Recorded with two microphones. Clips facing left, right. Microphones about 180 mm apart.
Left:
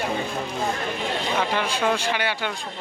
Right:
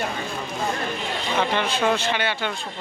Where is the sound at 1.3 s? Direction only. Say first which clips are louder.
Right 4 dB; 5° left (ahead or behind).